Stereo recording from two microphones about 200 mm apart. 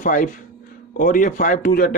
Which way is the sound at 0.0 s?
40° left (ahead or behind).